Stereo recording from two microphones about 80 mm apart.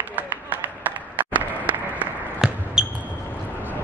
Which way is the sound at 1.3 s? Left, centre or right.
Centre.